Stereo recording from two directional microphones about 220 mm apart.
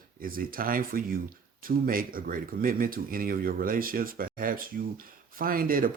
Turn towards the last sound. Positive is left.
turn(degrees=-40)  # may be behind; listen again after turning